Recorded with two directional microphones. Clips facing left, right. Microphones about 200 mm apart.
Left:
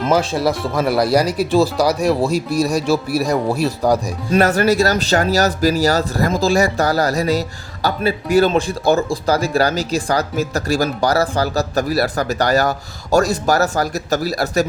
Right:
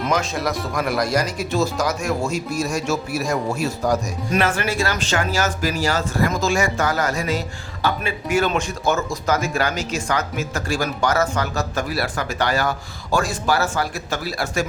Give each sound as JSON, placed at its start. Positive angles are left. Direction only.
{"t": 0.0, "sound": "speech", "side_deg": 30}